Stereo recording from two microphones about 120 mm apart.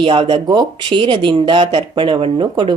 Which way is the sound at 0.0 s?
45° right (ahead or behind).